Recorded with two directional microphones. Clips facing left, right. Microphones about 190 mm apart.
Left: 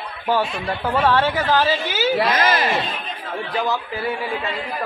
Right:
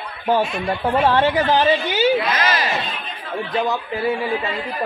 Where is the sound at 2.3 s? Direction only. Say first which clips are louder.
Left 2 dB; 50° left (ahead or behind).